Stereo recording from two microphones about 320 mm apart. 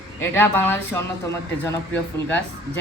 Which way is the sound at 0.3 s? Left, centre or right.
Centre.